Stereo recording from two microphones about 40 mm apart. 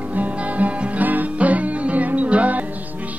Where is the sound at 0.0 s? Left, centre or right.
Right.